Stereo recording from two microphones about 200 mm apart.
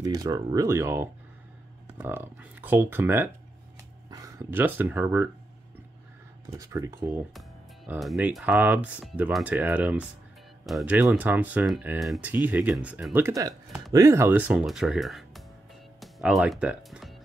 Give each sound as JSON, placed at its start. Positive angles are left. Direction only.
{"t": 0.0, "sound": "speech", "side_deg": -20}
{"t": 6.6, "sound": "speech", "side_deg": -15}